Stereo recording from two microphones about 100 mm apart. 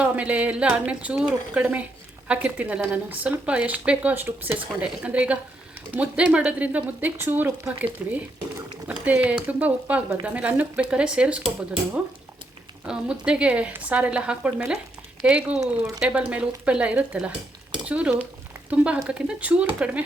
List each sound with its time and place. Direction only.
0.0 s speech: 15° right (ahead or behind)
12.8 s speech: 10° right (ahead or behind)